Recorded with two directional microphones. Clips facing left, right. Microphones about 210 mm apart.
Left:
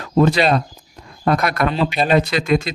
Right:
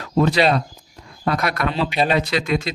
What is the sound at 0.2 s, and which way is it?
A man's voice, 45° left (ahead or behind).